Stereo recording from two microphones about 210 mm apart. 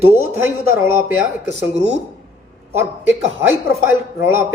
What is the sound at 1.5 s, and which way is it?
Speech, 30° right (ahead or behind).